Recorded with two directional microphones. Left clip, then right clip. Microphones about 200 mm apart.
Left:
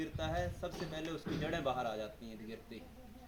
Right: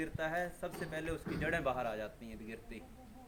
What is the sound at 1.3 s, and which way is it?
Speech, 35° left (ahead or behind).